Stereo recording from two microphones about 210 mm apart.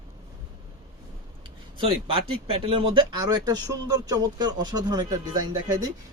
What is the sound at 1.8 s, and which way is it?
Speech, 25° right (ahead or behind).